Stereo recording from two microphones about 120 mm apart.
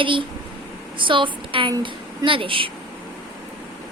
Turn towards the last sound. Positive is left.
turn(degrees=-45)  # may be behind; listen again after turning